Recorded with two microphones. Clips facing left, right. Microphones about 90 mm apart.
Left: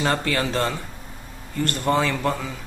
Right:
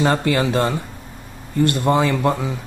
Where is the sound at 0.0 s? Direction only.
15° right (ahead or behind).